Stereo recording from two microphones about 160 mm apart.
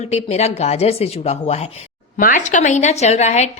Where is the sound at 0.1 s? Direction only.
40° left (ahead or behind).